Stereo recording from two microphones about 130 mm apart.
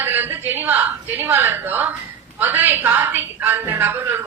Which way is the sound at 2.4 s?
15° right (ahead or behind).